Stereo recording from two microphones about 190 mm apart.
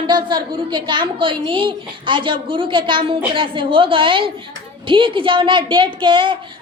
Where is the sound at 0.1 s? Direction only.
25° right (ahead or behind).